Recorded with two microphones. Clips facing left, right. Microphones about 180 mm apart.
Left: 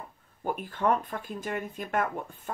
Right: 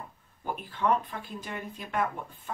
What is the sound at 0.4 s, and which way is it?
Speech, 45° left (ahead or behind).